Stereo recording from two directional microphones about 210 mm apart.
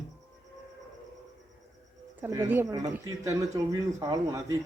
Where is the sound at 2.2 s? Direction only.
10° right (ahead or behind).